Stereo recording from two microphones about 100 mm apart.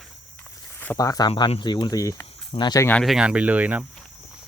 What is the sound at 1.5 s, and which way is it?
Speech, 50° left (ahead or behind).